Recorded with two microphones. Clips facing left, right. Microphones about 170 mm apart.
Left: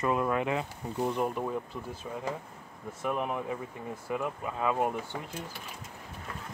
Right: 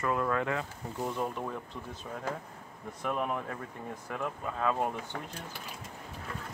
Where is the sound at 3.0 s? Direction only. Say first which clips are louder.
Left 1 dB; 5° left (ahead or behind).